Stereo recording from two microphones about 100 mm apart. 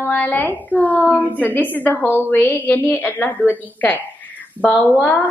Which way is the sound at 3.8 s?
15° left (ahead or behind).